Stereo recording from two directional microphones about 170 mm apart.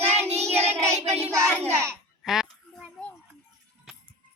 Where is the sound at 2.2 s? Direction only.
Centre (ahead or behind).